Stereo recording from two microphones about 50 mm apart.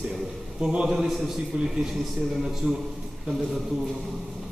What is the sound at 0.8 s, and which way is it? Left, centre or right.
Speech, centre.